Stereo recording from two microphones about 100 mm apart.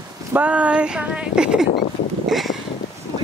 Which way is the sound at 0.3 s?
15° right (ahead or behind).